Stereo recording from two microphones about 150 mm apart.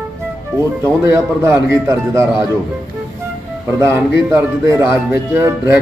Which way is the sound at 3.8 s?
20° right (ahead or behind).